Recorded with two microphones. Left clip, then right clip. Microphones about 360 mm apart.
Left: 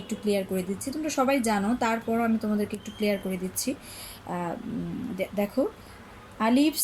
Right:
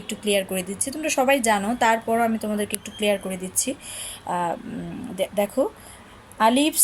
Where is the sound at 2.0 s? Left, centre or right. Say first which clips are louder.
Right 5 dB; right.